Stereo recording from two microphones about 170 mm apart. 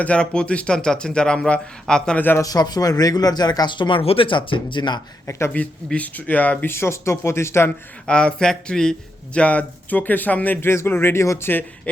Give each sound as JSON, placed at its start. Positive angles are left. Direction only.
{"t": 0.0, "sound": "a man's voice", "side_deg": 5}
{"t": 5.2, "sound": "speech", "side_deg": 15}